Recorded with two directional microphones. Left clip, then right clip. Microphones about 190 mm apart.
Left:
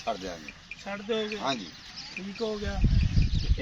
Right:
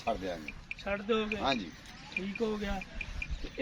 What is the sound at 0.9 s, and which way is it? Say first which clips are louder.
Speech: left 1 dB; 50° left (ahead or behind).